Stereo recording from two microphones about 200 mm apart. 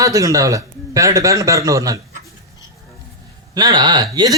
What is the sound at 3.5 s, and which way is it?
Speech, 20° right (ahead or behind).